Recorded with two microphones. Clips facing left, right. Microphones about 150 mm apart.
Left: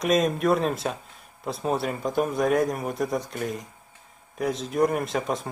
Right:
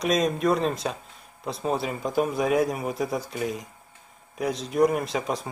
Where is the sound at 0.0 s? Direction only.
Centre (ahead or behind).